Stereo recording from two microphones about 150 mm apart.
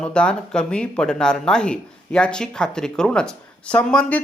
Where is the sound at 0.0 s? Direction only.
5° left (ahead or behind).